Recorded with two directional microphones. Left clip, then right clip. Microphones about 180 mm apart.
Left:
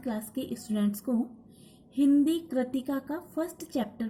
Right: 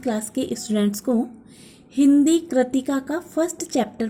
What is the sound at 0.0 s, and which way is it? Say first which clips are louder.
A woman's voice: right 10 dB; 35° right (ahead or behind).